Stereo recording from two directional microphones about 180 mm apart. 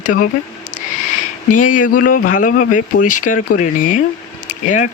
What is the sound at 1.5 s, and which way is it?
Speech, 45° left (ahead or behind).